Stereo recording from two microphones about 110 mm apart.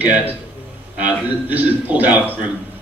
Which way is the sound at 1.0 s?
15° right (ahead or behind).